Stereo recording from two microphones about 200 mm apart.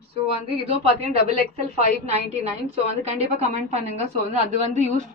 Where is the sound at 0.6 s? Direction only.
30° right (ahead or behind).